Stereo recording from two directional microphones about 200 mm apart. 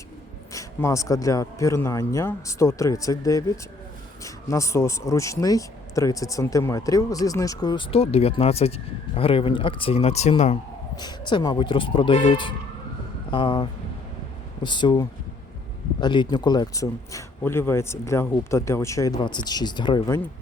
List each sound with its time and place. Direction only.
0.5 s speech: 15° left (ahead or behind); by 10.6 s 35° left (ahead or behind)
11.3 s speech: 25° left (ahead or behind)